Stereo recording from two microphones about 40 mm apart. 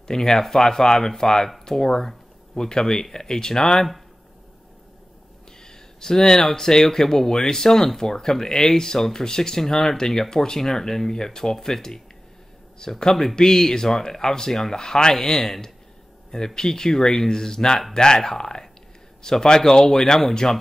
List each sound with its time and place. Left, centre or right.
0.1 s speech: centre
5.6 s speech: centre
13.1 s speech: centre